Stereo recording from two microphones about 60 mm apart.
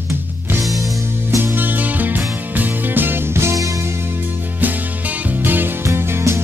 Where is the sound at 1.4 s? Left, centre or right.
Right.